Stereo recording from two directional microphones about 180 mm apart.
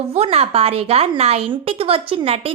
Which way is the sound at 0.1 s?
35° right (ahead or behind).